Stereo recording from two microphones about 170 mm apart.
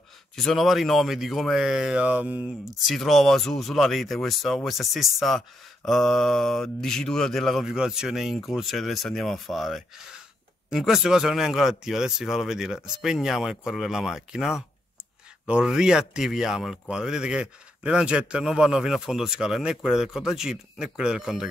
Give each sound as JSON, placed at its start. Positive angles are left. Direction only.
{"t": 0.4, "sound": "speech", "side_deg": 0}